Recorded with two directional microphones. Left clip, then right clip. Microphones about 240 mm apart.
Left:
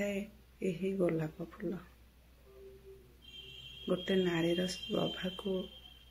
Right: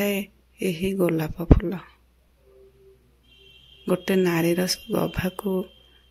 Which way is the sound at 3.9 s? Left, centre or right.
Right.